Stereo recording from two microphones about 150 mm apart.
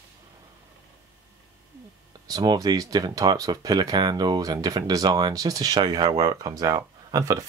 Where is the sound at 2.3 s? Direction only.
25° right (ahead or behind).